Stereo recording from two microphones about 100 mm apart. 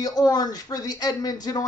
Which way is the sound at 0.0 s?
40° left (ahead or behind).